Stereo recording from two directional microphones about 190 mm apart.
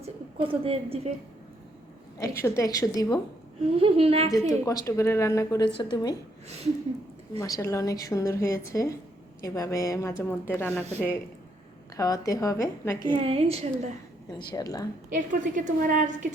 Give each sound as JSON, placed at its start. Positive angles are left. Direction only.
{"t": 0.0, "sound": "a woman's voice", "side_deg": -30}
{"t": 2.1, "sound": "a woman's voice", "side_deg": 15}
{"t": 3.8, "sound": "a woman's voice", "side_deg": -30}
{"t": 4.3, "sound": "a woman's voice", "side_deg": 15}
{"t": 7.3, "sound": "a woman's voice", "side_deg": 20}
{"t": 11.9, "sound": "a woman's voice", "side_deg": 15}
{"t": 13.1, "sound": "a woman's voice", "side_deg": -30}
{"t": 14.3, "sound": "speech", "side_deg": 20}
{"t": 15.1, "sound": "a woman's voice", "side_deg": -45}